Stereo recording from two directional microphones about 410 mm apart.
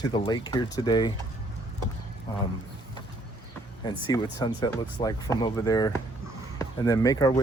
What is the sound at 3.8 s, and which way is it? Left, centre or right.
Speech, centre.